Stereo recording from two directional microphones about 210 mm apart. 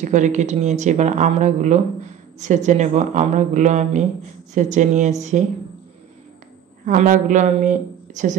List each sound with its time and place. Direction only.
0.0 s speech: 35° right (ahead or behind)
6.9 s speech: 40° right (ahead or behind)